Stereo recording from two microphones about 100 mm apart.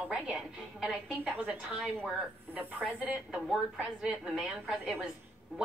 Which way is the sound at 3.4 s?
5° right (ahead or behind).